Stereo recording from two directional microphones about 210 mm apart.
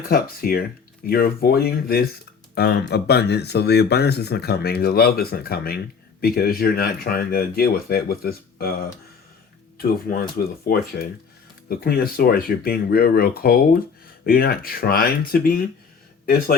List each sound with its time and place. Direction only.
0.1 s speech: 45° left (ahead or behind)